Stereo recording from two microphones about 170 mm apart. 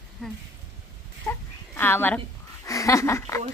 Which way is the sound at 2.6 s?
20° left (ahead or behind).